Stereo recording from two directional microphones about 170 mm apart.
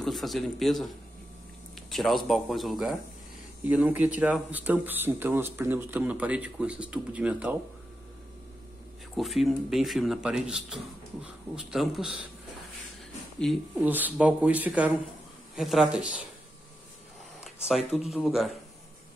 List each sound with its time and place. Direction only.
0.0 s speech: centre (ahead or behind)
9.1 s speech: centre (ahead or behind)
13.4 s speech: 5° left (ahead or behind)
13.7 s speech: 10° right (ahead or behind)
17.9 s speech: centre (ahead or behind)